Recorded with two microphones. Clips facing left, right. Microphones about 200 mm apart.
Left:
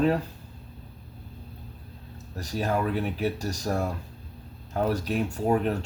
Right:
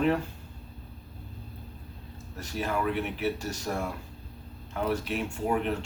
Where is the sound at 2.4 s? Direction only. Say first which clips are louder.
Left 3 dB; 40° left (ahead or behind).